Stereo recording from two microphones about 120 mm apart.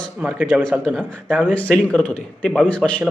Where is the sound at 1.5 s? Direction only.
10° left (ahead or behind).